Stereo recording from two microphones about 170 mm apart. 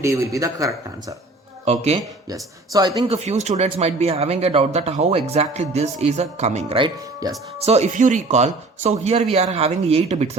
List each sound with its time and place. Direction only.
0.3 s speech: 20° right (ahead or behind)
1.6 s speech: 40° right (ahead or behind)
2.3 s speech: 25° right (ahead or behind)
3.1 s speech: 40° right (ahead or behind)
7.6 s speech: 40° right (ahead or behind)